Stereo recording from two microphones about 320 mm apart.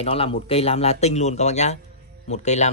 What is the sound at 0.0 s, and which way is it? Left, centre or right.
Speech, centre.